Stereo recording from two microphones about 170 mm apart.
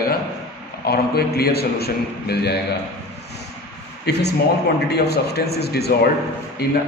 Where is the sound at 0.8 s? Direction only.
65° left (ahead or behind).